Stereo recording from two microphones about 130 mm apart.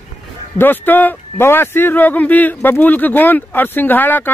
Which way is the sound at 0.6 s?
15° left (ahead or behind).